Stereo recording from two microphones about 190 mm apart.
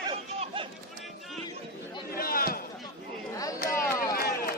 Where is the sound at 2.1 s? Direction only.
50° left (ahead or behind).